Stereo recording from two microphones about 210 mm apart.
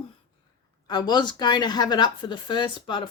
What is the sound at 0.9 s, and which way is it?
Speech, 20° left (ahead or behind).